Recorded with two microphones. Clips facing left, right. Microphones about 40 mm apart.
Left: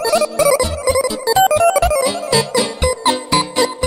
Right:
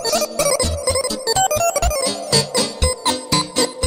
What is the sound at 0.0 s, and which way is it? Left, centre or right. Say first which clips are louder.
Music: left 5 dB; centre.